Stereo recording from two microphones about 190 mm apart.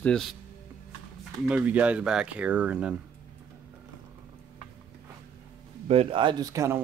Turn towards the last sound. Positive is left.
turn(degrees=-15)  # may be behind; listen again after turning